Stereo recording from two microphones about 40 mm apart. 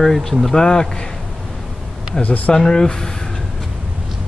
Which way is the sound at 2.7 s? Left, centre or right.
Centre.